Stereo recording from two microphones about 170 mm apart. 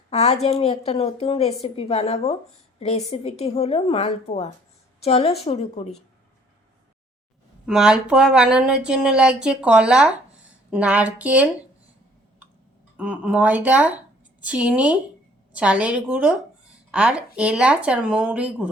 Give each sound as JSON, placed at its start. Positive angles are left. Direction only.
{"t": 0.1, "sound": "a woman's voice", "side_deg": 40}
{"t": 7.7, "sound": "speech", "side_deg": -5}
{"t": 13.0, "sound": "speech", "side_deg": -5}